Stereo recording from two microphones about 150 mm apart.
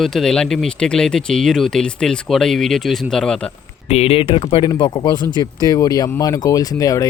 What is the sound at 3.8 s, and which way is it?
Speech, 45° left (ahead or behind).